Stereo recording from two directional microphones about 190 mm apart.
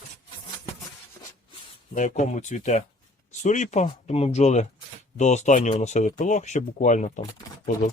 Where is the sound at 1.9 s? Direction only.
40° left (ahead or behind).